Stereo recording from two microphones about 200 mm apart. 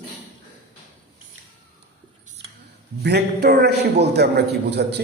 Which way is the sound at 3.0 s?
55° right (ahead or behind).